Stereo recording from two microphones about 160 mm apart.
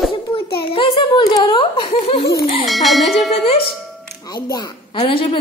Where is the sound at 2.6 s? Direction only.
Centre (ahead or behind).